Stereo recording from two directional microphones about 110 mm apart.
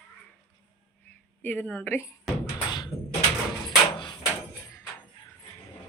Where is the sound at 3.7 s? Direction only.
45° left (ahead or behind).